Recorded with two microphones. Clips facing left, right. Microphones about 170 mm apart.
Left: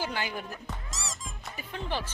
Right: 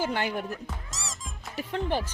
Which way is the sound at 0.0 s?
60° right (ahead or behind).